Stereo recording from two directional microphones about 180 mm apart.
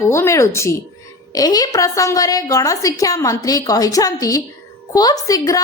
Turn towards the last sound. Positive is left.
turn(degrees=20)  # may be behind; listen again after turning